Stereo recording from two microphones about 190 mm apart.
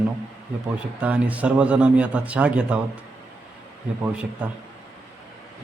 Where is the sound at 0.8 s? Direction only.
5° right (ahead or behind).